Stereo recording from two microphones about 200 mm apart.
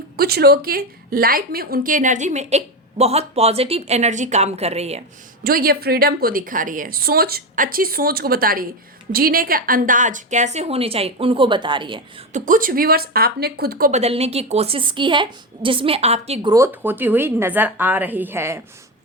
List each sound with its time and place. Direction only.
0.2 s a woman's voice: 50° right (ahead or behind); by 5.0 s 30° right (ahead or behind)
5.4 s a woman's voice: 45° right (ahead or behind); by 12.0 s 25° right (ahead or behind)
12.3 s a woman's voice: 45° right (ahead or behind)
14.0 s a woman's voice: 30° right (ahead or behind)
16.5 s a woman's voice: 15° right (ahead or behind)